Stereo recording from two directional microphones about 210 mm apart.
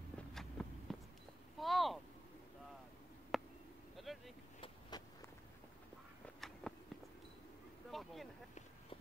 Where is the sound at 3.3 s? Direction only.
Centre (ahead or behind).